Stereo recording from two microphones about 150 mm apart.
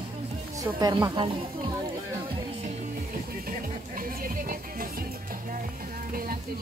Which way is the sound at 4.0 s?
70° right (ahead or behind).